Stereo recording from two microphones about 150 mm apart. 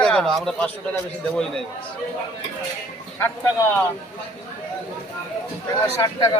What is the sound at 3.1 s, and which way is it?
Speech, 15° left (ahead or behind).